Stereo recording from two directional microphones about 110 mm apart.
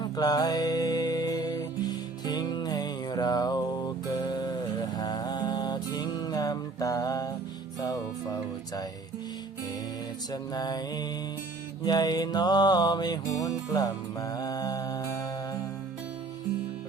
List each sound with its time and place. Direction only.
0.0 s music: 35° left (ahead or behind)
10.5 s music: 40° left (ahead or behind)